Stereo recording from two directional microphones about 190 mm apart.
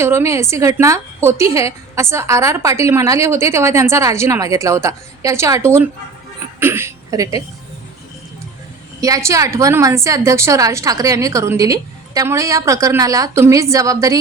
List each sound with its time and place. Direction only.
0.0 s a woman's voice: 15° right (ahead or behind)
9.0 s a woman's voice: 15° right (ahead or behind)